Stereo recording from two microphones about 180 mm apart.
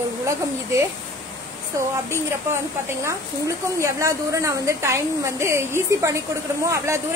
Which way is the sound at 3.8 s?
15° right (ahead or behind).